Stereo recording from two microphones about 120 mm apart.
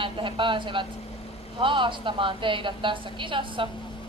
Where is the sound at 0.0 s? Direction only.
45° right (ahead or behind).